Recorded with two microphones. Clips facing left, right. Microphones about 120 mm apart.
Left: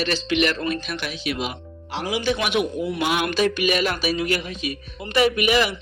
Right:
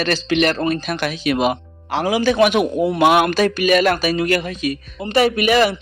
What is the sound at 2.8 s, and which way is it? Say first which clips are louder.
Speech: right 9 dB; 60° right (ahead or behind).